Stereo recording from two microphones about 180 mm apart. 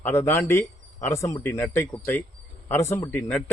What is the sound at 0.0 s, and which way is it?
Speech, 15° left (ahead or behind).